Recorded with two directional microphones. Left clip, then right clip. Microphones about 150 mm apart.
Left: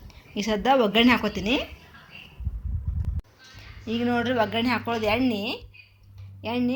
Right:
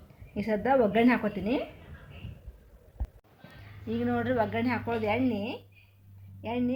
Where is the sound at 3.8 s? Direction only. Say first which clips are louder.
Left 4 dB; 30° left (ahead or behind).